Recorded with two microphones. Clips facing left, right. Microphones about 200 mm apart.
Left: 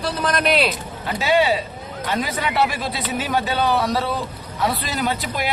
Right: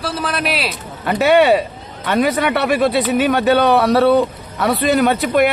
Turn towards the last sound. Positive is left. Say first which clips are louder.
# right 10 dB
turn(degrees=-60)  # may be behind; listen again after turning